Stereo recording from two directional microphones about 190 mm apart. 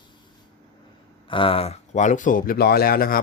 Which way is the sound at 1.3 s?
25° left (ahead or behind).